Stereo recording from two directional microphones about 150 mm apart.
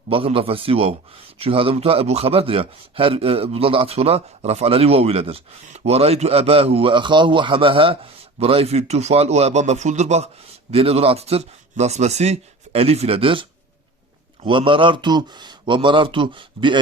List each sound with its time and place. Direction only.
0.1 s a man's voice: 35° right (ahead or behind)